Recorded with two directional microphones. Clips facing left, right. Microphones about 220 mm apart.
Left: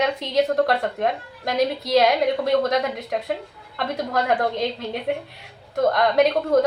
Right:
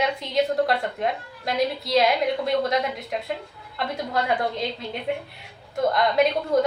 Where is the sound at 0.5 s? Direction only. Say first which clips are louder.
Left 3 dB; 55° left (ahead or behind).